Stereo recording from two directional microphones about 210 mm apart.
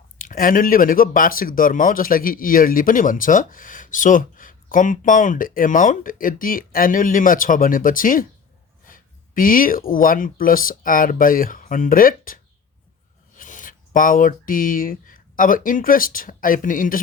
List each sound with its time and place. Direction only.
0.2 s speech: 40° left (ahead or behind)